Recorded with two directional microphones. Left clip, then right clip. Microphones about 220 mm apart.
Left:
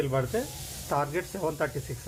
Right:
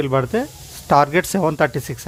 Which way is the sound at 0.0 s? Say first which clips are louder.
Right 9 dB; 55° right (ahead or behind).